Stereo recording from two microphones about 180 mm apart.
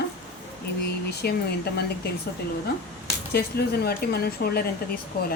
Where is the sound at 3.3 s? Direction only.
60° left (ahead or behind).